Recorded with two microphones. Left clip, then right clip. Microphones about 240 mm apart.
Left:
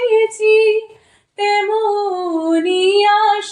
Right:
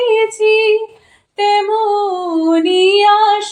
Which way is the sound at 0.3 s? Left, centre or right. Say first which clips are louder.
Even; right.